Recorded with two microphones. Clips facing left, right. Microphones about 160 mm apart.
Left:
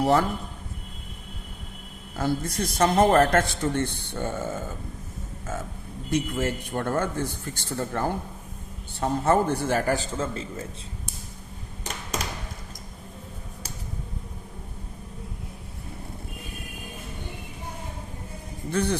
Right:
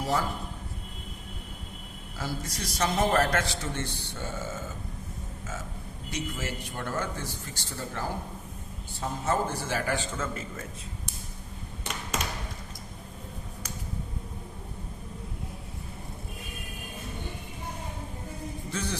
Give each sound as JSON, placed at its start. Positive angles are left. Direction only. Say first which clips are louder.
{"t": 0.0, "sound": "a man's voice", "louder": "left 8 dB", "side_deg": 65}
{"t": 2.1, "sound": "a man's voice", "louder": "left 9 dB", "side_deg": 55}
{"t": 6.1, "sound": "a man's voice", "louder": "left 9 dB", "side_deg": 55}
{"t": 18.7, "sound": "a man's voice", "louder": "left 9 dB", "side_deg": 60}